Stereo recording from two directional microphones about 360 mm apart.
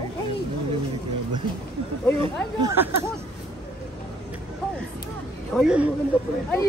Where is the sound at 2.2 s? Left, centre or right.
Centre.